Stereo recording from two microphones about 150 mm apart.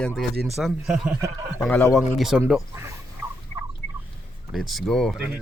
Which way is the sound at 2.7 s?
15° right (ahead or behind).